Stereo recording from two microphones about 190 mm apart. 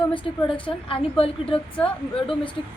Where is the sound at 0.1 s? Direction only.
25° left (ahead or behind).